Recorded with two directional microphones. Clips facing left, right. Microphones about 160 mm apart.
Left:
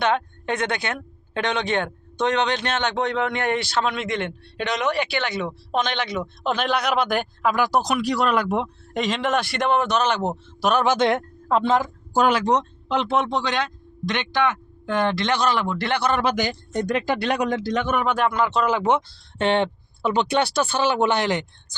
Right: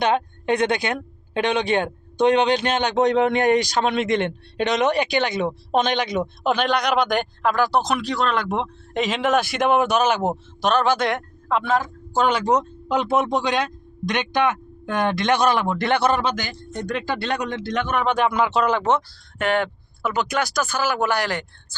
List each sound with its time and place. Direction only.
0.0 s speech: 15° right (ahead or behind)
6.4 s speech: centre (ahead or behind)
10.6 s speech: 10° left (ahead or behind)
12.5 s speech: 5° right (ahead or behind); by 16.1 s 25° right (ahead or behind)
16.3 s speech: 15° left (ahead or behind)
19.4 s speech: 25° left (ahead or behind)